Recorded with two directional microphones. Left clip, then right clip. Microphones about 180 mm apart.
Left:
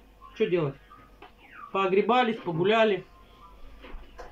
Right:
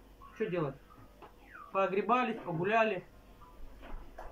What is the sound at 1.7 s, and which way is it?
A man's voice, 20° left (ahead or behind).